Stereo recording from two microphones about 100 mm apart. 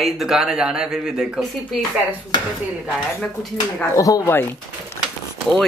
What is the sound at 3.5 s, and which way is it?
Speech, 35° left (ahead or behind).